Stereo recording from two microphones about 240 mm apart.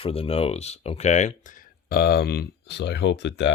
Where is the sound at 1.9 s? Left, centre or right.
Left.